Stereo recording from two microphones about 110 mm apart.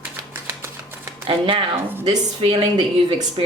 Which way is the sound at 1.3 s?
55° right (ahead or behind).